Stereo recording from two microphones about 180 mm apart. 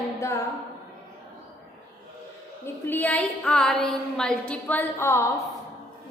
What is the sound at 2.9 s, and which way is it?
A woman's voice, 10° left (ahead or behind).